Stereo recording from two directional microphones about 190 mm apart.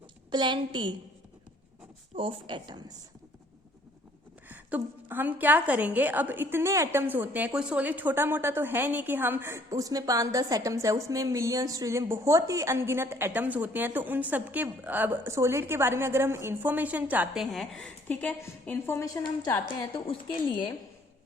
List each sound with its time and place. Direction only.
0.3 s a woman's voice: 25° right (ahead or behind)
2.1 s a woman's voice: 25° right (ahead or behind)
4.4 s a woman's voice: 10° right (ahead or behind); by 19.5 s 15° left (ahead or behind)